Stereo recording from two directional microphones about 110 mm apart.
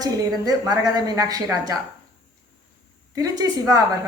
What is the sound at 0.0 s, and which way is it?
A woman's voice, 35° right (ahead or behind).